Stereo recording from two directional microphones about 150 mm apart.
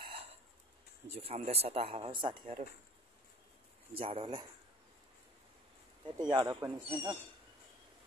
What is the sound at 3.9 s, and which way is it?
Speech, 35° right (ahead or behind).